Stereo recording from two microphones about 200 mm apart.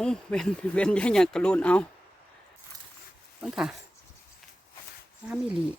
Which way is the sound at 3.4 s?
5° right (ahead or behind).